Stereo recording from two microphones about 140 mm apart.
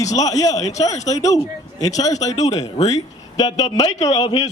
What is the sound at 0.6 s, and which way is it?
Speech, 55° left (ahead or behind).